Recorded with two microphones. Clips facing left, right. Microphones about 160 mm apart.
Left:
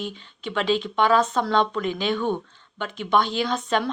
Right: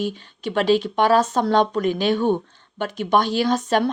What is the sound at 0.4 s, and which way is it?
Speech, 40° right (ahead or behind).